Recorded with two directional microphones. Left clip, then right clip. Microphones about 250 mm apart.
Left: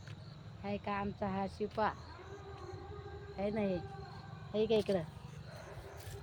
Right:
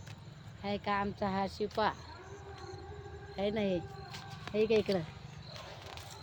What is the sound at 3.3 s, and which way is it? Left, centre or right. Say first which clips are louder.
Speech: right 3 dB; right.